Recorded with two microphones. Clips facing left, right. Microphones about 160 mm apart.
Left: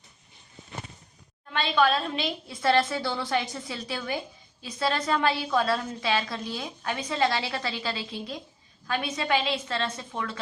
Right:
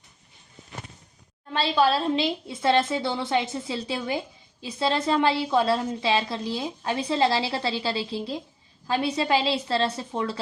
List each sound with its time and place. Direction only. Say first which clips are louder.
1.5 s a woman's voice: right 2 dB; 30° right (ahead or behind)